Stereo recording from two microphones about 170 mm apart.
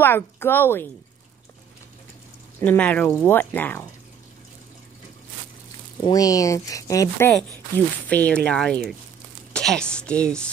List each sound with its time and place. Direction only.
0.0 s speech: 15° left (ahead or behind)
2.6 s speech: 10° left (ahead or behind)
6.0 s a woman's voice: 20° left (ahead or behind); by 10.5 s 5° left (ahead or behind)